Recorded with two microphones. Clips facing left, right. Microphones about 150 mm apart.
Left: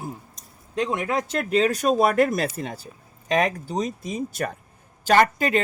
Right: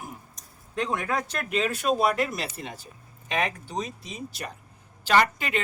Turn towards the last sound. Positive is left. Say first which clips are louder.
# left 4 dB
turn(degrees=40)  # may be behind; listen again after turning